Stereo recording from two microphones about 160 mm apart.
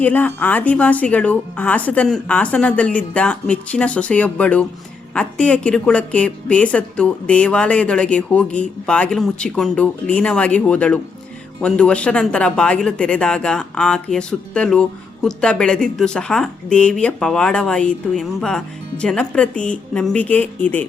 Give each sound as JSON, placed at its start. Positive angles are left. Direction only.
{"t": 0.0, "sound": "a woman's voice", "side_deg": 10}